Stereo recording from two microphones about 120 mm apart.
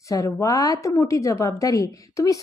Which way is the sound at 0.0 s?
25° left (ahead or behind).